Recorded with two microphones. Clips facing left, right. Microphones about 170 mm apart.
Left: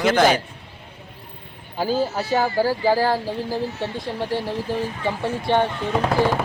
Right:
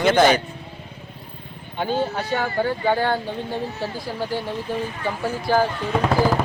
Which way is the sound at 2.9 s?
30° left (ahead or behind).